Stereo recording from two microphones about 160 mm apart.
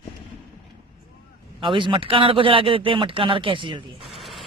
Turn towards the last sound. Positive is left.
turn(degrees=0)  # may be behind; listen again after turning